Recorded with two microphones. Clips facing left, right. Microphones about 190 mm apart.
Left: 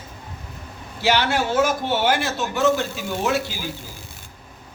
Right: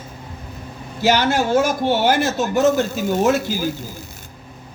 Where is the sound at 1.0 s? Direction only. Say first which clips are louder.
Right 3 dB; 45° right (ahead or behind).